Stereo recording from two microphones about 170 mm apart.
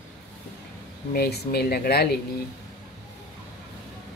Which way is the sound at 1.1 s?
65° left (ahead or behind).